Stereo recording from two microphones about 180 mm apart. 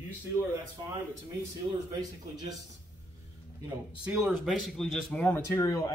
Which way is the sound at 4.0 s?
5° right (ahead or behind).